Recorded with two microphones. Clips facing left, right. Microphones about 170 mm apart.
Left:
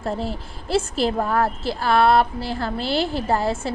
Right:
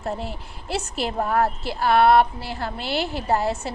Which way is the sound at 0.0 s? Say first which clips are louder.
Left 3 dB; 35° left (ahead or behind).